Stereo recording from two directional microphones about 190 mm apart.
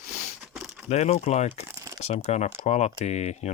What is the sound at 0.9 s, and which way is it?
Speech, 35° left (ahead or behind).